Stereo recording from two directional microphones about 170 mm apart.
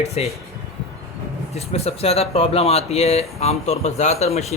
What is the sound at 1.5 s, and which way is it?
Speech, 40° left (ahead or behind).